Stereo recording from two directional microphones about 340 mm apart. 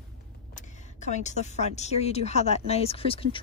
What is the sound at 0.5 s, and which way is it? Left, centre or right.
A woman's voice, left.